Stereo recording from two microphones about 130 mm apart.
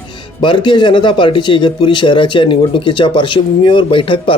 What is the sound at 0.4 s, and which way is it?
Speech, 35° left (ahead or behind).